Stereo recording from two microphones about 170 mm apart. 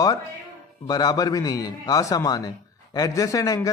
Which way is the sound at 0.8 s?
25° left (ahead or behind).